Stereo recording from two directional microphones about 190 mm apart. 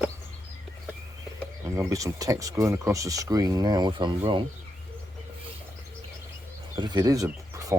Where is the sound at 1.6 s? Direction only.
15° right (ahead or behind).